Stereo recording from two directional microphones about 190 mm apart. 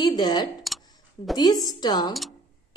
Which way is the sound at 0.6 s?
Centre (ahead or behind).